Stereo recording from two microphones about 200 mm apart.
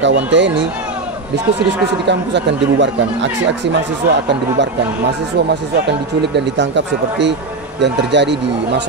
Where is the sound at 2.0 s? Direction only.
60° right (ahead or behind).